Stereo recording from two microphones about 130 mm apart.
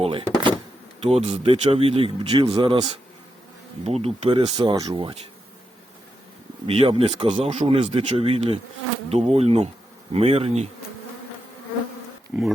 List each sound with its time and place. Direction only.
0.0 s a sound: 45° right (ahead or behind)
1.0 s speech: 50° right (ahead or behind)
3.8 s speech: 50° right (ahead or behind)
4.7 s speech: 30° right (ahead or behind)
6.7 s speech: 45° right (ahead or behind)
12.3 s speech: 10° right (ahead or behind)